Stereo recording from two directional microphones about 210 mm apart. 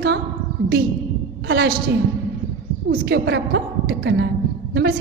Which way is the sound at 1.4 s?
50° right (ahead or behind).